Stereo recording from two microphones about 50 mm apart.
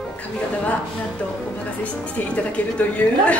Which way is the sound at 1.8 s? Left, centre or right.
Left.